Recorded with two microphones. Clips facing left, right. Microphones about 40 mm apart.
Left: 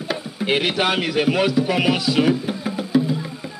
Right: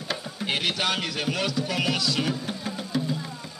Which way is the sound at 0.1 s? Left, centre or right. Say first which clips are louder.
Left 7 dB; centre.